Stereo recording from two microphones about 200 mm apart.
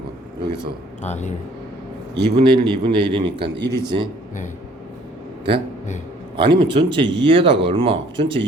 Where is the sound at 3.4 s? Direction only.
55° right (ahead or behind).